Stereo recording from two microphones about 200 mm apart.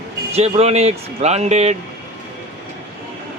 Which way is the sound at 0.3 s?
30° right (ahead or behind).